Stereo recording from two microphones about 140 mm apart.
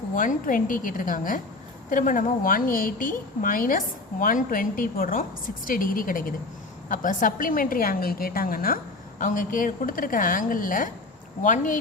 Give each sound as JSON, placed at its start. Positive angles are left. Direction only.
{"t": 0.2, "sound": "a woman's voice", "side_deg": 70}
{"t": 6.8, "sound": "a woman's voice", "side_deg": 70}